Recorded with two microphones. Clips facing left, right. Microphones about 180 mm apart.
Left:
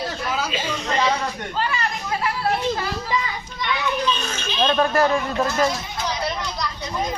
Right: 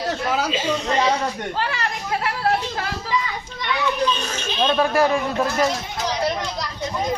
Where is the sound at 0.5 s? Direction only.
30° right (ahead or behind).